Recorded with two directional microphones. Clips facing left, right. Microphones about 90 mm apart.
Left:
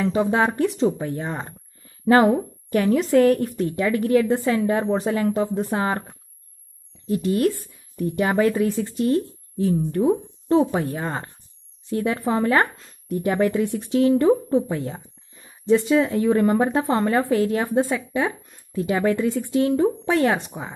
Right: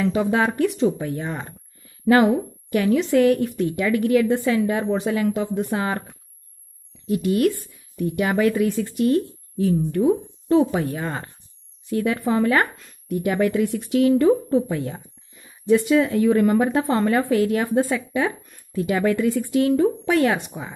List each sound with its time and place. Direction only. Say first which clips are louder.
0.0 s a woman's voice: even; 30° left (ahead or behind)